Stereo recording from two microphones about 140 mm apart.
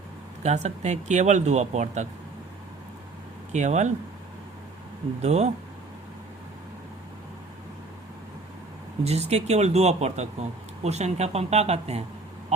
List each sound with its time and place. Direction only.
0.4 s speech: 55° right (ahead or behind)
3.5 s speech: 55° right (ahead or behind)
5.2 s speech: 50° right (ahead or behind)
9.0 s speech: 50° right (ahead or behind)